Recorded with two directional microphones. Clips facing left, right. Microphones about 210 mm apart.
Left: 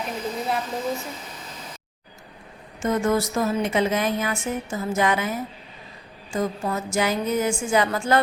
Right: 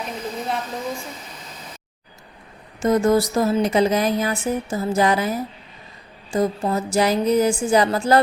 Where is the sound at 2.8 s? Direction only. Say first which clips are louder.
Right 5 dB; 35° right (ahead or behind).